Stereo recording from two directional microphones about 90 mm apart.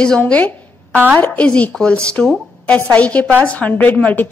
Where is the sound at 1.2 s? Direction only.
15° left (ahead or behind).